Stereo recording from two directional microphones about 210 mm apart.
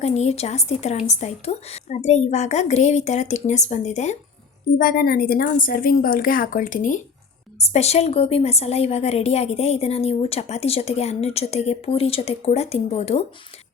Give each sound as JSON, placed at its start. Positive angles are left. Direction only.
{"t": 0.0, "sound": "a woman's voice", "side_deg": 30}
{"t": 4.8, "sound": "a woman's voice", "side_deg": 45}